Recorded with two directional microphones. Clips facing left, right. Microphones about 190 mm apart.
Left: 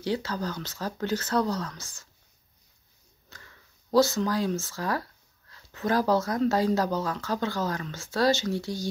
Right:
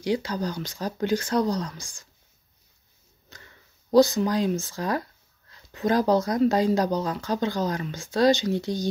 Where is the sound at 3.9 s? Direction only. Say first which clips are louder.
Right 4 dB; 15° right (ahead or behind).